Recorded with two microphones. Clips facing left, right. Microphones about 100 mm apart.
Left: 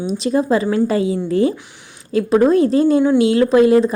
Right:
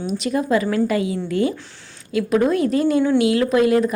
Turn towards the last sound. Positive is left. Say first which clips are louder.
# left 5 dB
turn(degrees=30)  # may be behind; listen again after turning